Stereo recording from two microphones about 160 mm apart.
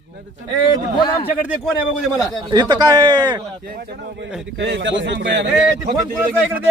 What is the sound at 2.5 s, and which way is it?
Speech, 25° right (ahead or behind).